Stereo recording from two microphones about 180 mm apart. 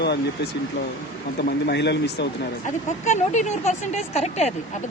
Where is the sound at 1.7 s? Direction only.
70° left (ahead or behind).